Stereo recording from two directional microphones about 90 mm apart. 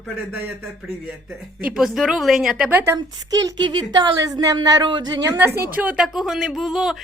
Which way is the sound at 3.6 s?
55° right (ahead or behind).